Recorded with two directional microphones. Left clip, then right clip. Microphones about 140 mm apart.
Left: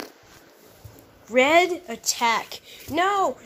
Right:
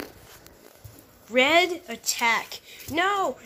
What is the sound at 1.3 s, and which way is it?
Speech, 15° left (ahead or behind).